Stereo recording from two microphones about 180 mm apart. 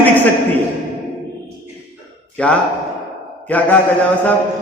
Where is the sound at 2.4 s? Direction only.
5° left (ahead or behind).